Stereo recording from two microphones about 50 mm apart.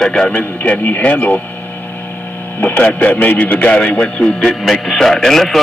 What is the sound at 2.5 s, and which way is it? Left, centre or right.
A man's voice, left.